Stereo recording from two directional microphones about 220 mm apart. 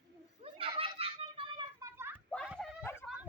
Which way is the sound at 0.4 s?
25° right (ahead or behind).